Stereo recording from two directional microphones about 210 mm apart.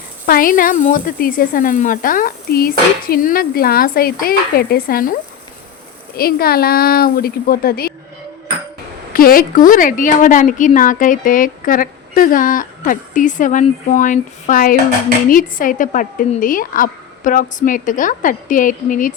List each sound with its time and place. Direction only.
0.3 s speech: 40° left (ahead or behind)
6.1 s speech: 45° left (ahead or behind)
9.1 s a sound: 45° left (ahead or behind)